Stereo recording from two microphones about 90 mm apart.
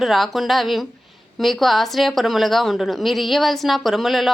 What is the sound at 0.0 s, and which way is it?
A woman's voice, centre (ahead or behind).